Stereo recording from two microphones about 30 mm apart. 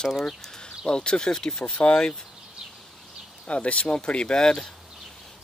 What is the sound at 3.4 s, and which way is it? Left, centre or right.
Speech, left.